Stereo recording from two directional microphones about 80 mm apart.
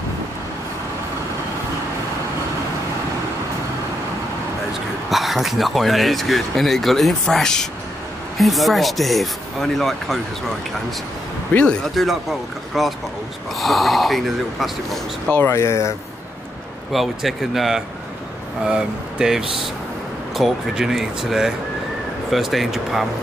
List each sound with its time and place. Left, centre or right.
5.1 s speech: centre
11.5 s speech: centre
11.9 s speech: centre
15.3 s speech: left
16.9 s speech: centre